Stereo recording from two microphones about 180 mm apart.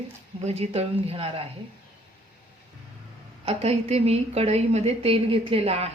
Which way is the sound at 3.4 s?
35° right (ahead or behind).